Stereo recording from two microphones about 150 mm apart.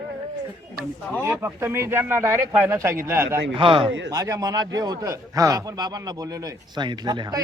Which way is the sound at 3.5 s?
35° right (ahead or behind).